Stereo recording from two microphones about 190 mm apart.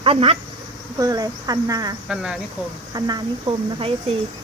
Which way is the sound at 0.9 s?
20° right (ahead or behind).